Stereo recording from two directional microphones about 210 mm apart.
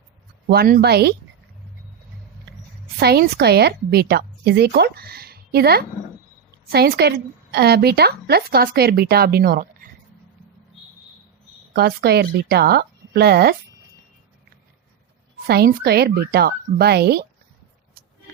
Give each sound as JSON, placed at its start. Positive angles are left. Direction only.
{"t": 0.4, "sound": "a woman's voice", "side_deg": -45}
{"t": 3.0, "sound": "a woman's voice", "side_deg": -50}
{"t": 11.7, "sound": "a woman's voice", "side_deg": -50}
{"t": 15.4, "sound": "a woman's voice", "side_deg": -50}